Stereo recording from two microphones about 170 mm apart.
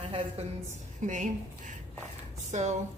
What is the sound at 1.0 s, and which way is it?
Speech, 45° right (ahead or behind).